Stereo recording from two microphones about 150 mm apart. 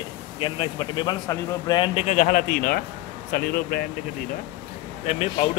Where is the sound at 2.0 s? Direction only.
55° left (ahead or behind); by 3.8 s 70° left (ahead or behind).